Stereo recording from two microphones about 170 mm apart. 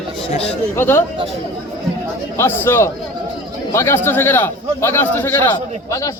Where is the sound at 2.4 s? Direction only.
15° left (ahead or behind).